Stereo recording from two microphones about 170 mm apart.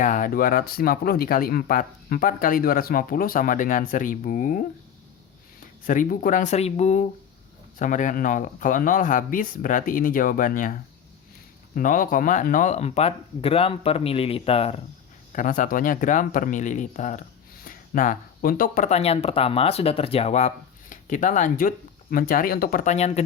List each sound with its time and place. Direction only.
0.0 s speech: 50° left (ahead or behind)
5.8 s speech: 50° left (ahead or behind); by 14.8 s 35° left (ahead or behind)
15.3 s speech: 50° left (ahead or behind)